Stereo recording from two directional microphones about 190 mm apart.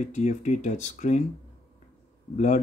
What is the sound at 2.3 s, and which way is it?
Speech, 40° left (ahead or behind).